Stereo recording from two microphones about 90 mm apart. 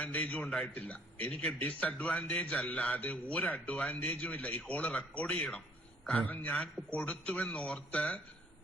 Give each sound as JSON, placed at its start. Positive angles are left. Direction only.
{"t": 0.0, "sound": "a man's voice", "side_deg": 15}